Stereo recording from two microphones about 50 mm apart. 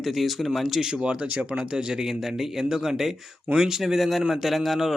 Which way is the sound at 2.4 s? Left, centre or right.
Centre.